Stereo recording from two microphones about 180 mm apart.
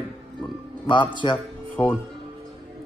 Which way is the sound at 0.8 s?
25° left (ahead or behind).